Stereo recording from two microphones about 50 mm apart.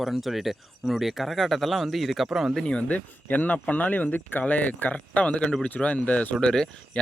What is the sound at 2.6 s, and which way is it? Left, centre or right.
Speech, left.